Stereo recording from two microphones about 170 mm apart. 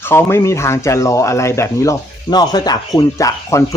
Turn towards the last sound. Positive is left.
turn(degrees=20)  # may be behind; listen again after turning